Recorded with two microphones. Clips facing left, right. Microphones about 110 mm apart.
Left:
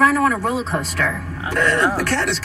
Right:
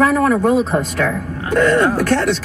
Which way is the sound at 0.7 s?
35° right (ahead or behind).